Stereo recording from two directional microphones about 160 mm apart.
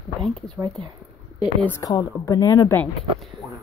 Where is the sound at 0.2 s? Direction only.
5° left (ahead or behind).